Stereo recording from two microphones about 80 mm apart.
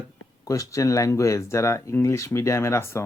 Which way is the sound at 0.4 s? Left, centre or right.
Left.